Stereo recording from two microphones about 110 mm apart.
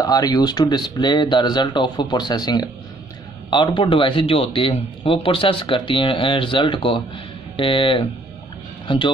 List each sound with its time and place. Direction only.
0.0 s speech: 35° left (ahead or behind)